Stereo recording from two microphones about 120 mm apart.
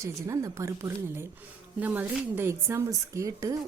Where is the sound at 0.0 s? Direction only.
25° right (ahead or behind).